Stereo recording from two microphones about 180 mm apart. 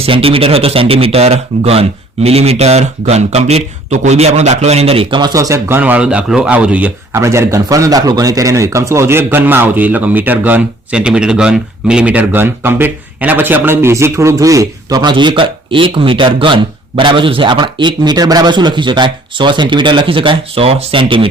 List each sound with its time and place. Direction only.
0.0 s speech: 30° right (ahead or behind)